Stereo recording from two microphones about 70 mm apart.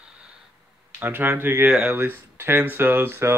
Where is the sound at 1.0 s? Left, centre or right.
Right.